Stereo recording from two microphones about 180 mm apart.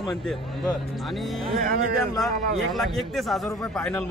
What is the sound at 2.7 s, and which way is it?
Speech, centre (ahead or behind).